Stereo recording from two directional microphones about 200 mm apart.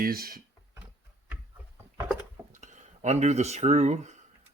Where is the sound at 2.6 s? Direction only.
35° right (ahead or behind).